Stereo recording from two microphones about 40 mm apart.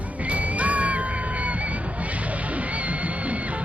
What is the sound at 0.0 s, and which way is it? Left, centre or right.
Music, right.